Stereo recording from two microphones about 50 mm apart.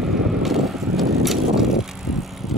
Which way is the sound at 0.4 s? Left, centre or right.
Centre.